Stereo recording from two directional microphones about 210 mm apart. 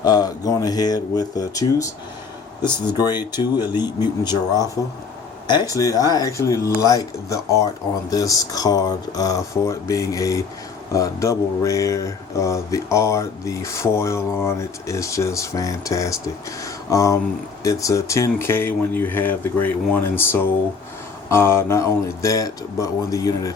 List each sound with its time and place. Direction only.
0.0 s speech: 20° left (ahead or behind)